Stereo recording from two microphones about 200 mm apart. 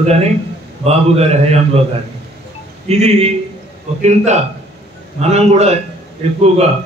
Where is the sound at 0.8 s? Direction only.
30° right (ahead or behind).